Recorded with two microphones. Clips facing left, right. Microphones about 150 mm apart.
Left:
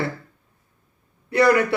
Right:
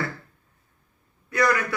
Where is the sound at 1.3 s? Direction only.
30° left (ahead or behind).